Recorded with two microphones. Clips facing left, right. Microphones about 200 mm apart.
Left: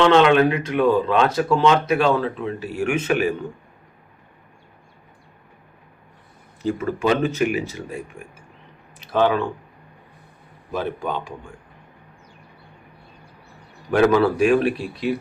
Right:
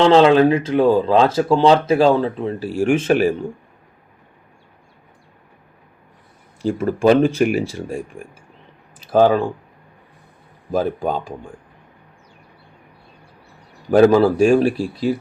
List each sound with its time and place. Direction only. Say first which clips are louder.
0.0 s speech: right 3 dB; 30° right (ahead or behind)
6.7 s speech: right 8 dB; 45° right (ahead or behind)
10.7 s speech: right 6 dB; 40° right (ahead or behind)
13.9 s speech: right 5 dB; 30° right (ahead or behind)